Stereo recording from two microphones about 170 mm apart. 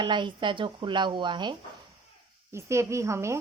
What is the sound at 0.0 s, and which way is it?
Speech, 25° right (ahead or behind).